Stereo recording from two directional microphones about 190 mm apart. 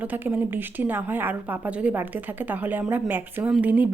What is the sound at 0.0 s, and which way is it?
Speech, 10° right (ahead or behind).